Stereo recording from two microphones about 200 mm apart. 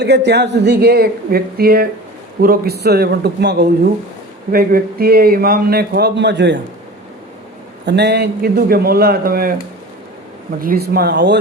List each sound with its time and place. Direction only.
0.0 s a man's voice: 60° right (ahead or behind)
7.9 s a man's voice: 60° right (ahead or behind)
10.6 s a man's voice: 45° right (ahead or behind)